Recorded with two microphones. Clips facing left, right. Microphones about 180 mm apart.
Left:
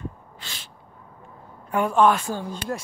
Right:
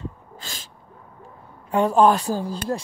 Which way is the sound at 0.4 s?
45° right (ahead or behind).